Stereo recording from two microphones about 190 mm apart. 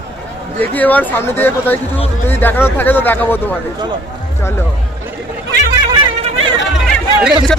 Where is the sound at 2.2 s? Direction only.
10° left (ahead or behind).